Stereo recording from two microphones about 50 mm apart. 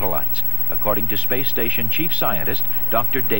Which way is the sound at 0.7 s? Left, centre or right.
Centre.